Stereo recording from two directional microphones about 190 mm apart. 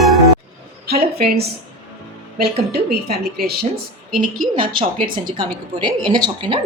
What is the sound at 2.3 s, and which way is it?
A woman's voice, 55° right (ahead or behind).